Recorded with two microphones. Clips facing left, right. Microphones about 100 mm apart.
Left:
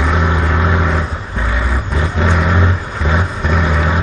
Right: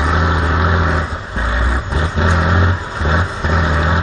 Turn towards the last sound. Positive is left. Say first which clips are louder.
# even
turn(degrees=-25)  # may be behind; listen again after turning